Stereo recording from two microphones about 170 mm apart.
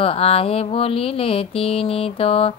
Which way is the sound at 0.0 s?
35° left (ahead or behind).